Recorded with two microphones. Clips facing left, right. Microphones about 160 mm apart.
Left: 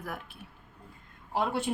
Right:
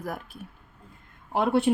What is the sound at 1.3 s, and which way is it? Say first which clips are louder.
Speech: right 7 dB; 60° right (ahead or behind).